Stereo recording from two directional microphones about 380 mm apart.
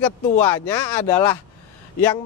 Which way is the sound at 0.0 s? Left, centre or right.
Centre.